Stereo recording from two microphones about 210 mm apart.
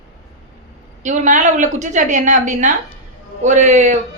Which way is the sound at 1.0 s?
35° right (ahead or behind).